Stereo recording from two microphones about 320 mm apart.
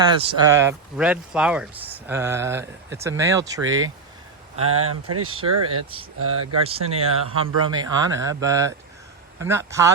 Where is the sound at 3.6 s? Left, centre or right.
Right.